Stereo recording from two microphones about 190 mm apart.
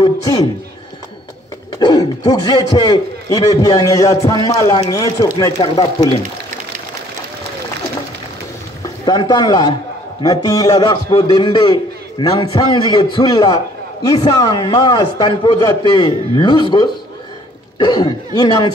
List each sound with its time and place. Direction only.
1.8 s a man's voice: 20° left (ahead or behind)
9.0 s a man's voice: 25° left (ahead or behind)